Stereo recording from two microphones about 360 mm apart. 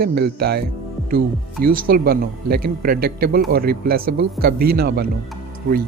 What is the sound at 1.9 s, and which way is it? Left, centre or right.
Speech, right.